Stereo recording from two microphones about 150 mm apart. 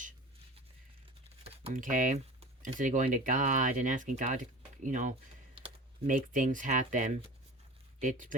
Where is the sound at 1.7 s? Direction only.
60° right (ahead or behind).